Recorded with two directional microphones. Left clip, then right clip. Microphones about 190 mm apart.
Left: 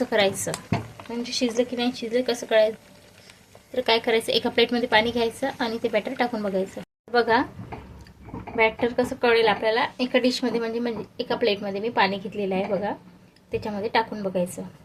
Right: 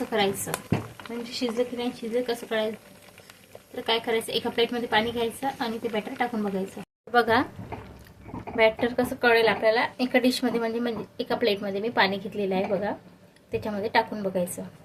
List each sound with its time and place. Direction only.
0.1 s a woman's voice: 45° left (ahead or behind)
3.8 s a woman's voice: 45° left (ahead or behind)
7.1 s speech: 5° left (ahead or behind)
8.5 s a woman's voice: 10° left (ahead or behind)